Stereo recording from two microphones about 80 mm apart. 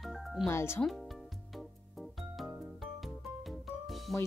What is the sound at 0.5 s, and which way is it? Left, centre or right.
Speech, left.